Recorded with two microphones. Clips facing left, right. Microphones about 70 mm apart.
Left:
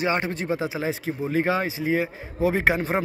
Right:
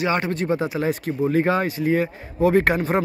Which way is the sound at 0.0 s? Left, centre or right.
Centre.